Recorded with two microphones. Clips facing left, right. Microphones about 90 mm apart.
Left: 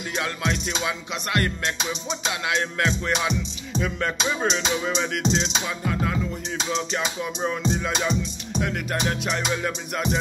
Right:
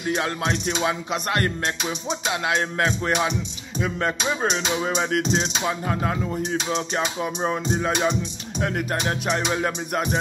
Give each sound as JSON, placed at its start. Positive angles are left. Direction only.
{"t": 0.1, "sound": "music", "side_deg": -30}
{"t": 3.8, "sound": "speech", "side_deg": -30}
{"t": 4.8, "sound": "music", "side_deg": -45}
{"t": 6.5, "sound": "music", "side_deg": -50}
{"t": 7.2, "sound": "music", "side_deg": -35}